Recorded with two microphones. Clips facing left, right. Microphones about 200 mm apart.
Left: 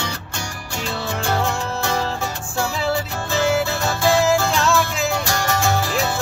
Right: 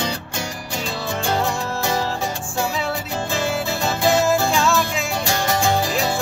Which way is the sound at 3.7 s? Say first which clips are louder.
Even; 15° right (ahead or behind).